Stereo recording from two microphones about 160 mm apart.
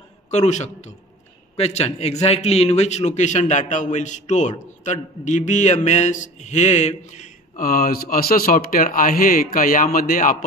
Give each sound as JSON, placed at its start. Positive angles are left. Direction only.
{"t": 0.3, "sound": "a man's voice", "side_deg": 45}